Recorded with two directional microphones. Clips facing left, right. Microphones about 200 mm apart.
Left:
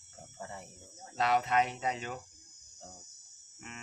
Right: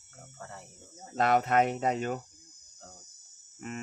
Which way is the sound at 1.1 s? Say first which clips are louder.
Right 4 dB; 50° right (ahead or behind).